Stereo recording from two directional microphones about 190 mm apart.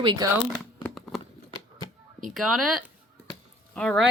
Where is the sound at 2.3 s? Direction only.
Centre (ahead or behind).